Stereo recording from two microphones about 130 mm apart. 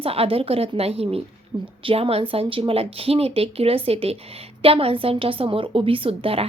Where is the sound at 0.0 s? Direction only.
50° right (ahead or behind).